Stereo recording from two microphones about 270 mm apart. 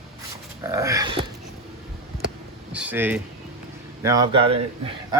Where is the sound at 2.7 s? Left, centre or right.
Centre.